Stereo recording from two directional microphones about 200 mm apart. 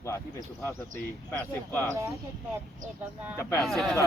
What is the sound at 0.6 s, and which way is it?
Speech, 15° left (ahead or behind).